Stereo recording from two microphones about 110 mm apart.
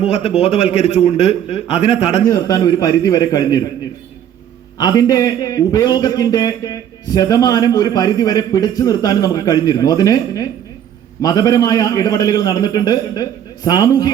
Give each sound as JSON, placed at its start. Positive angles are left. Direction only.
{"t": 0.1, "sound": "a man's voice", "side_deg": 65}
{"t": 2.3, "sound": "a man's voice", "side_deg": 35}
{"t": 4.8, "sound": "a man's voice", "side_deg": 35}